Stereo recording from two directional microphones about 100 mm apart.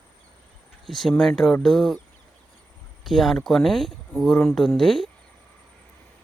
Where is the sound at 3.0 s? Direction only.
Centre (ahead or behind).